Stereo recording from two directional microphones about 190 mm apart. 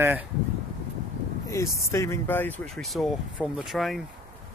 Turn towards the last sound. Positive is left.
turn(degrees=0)  # may be behind; listen again after turning